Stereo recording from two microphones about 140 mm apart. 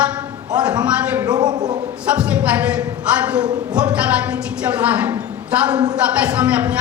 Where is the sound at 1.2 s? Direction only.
30° right (ahead or behind).